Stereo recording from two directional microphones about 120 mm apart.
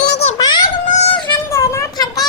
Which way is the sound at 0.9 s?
70° left (ahead or behind).